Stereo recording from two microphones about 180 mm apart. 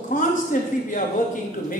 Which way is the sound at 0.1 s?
45° left (ahead or behind).